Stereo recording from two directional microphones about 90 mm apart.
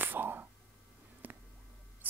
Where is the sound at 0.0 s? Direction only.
20° right (ahead or behind).